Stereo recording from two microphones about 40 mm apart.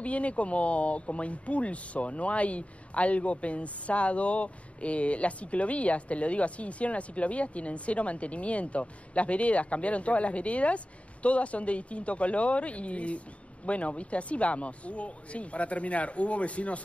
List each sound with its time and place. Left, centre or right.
0.0 s speech: left